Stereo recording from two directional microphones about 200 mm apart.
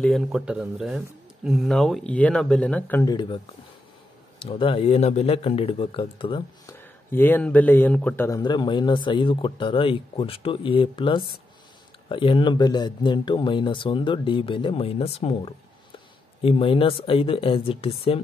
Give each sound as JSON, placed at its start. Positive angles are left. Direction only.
{"t": 0.0, "sound": "speech", "side_deg": 0}
{"t": 4.4, "sound": "speech", "side_deg": 25}
{"t": 6.8, "sound": "speech", "side_deg": 10}
{"t": 8.4, "sound": "speech", "side_deg": 20}